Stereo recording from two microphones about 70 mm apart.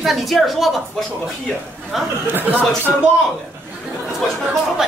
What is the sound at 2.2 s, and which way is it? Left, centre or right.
Speech, right.